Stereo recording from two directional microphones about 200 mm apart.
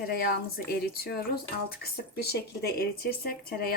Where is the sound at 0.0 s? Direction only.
50° left (ahead or behind).